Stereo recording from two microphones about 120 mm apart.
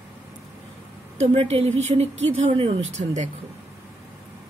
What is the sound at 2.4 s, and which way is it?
Speech, 50° right (ahead or behind).